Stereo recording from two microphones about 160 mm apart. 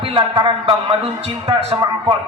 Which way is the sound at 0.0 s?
30° right (ahead or behind).